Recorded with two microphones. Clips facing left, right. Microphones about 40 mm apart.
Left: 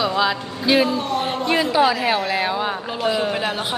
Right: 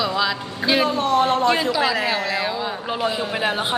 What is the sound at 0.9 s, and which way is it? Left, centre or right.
Speech, right.